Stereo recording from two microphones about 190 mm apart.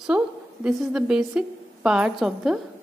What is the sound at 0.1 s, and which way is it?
A woman's voice, 5° right (ahead or behind).